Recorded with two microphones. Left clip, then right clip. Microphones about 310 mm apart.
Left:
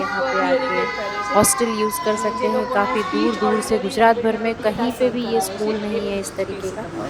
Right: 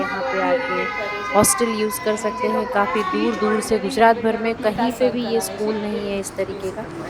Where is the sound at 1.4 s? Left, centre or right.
Centre.